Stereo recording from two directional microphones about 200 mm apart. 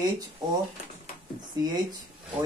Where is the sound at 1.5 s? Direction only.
20° right (ahead or behind).